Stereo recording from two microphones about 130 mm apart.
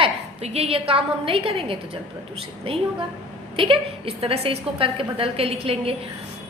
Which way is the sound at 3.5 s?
45° right (ahead or behind).